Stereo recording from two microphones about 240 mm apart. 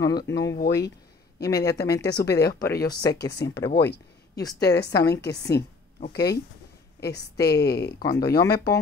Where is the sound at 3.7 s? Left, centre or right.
Left.